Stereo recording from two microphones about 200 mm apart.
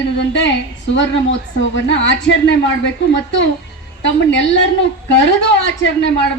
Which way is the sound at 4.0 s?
65° left (ahead or behind).